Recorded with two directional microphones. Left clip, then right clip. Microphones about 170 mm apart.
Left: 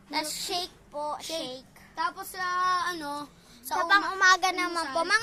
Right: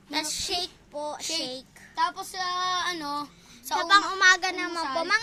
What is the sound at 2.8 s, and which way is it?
Speech, 45° right (ahead or behind).